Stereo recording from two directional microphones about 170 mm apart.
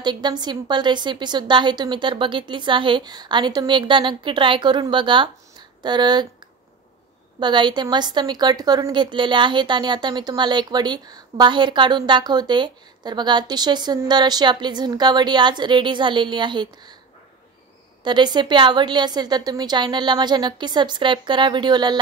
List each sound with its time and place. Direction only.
0.0 s a woman's voice: 25° right (ahead or behind)
7.3 s a woman's voice: 25° right (ahead or behind)
18.0 s a woman's voice: 25° right (ahead or behind)